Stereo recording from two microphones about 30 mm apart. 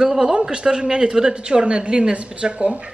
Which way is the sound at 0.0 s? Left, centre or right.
Right.